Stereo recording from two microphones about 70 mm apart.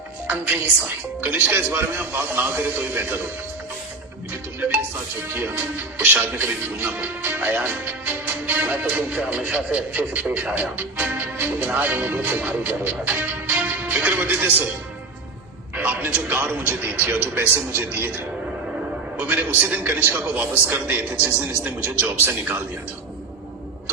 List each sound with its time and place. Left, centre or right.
1.2 s speech: right
5.3 s speech: right
12.4 s music: right
15.7 s speech: right
18.6 s music: centre
19.2 s a man's voice: right